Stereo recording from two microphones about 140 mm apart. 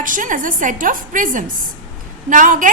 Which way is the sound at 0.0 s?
70° right (ahead or behind).